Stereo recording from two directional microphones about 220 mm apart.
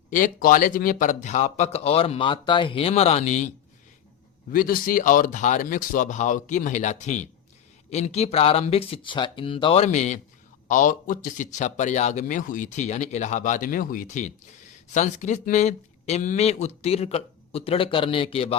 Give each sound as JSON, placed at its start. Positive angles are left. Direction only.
{"t": 0.1, "sound": "speech", "side_deg": 40}
{"t": 4.5, "sound": "speech", "side_deg": 40}